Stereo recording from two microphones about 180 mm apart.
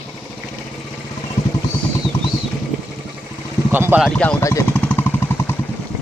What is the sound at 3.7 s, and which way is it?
Speech, 10° right (ahead or behind).